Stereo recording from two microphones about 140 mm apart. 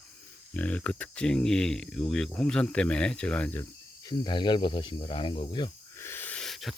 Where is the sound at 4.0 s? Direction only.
30° left (ahead or behind).